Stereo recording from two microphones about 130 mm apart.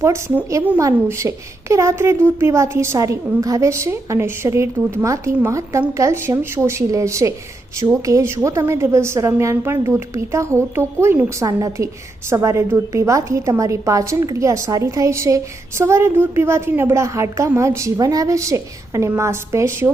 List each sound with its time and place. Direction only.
0.0 s a woman's voice: 20° right (ahead or behind)